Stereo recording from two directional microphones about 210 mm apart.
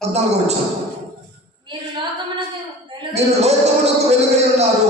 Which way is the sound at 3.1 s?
30° right (ahead or behind).